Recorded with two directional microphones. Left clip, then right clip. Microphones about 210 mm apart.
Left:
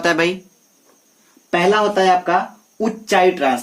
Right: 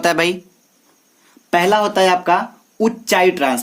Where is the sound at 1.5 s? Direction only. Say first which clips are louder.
Right 1 dB; 50° right (ahead or behind).